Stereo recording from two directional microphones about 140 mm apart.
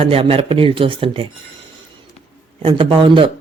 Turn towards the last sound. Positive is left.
turn(degrees=-40)  # may be behind; listen again after turning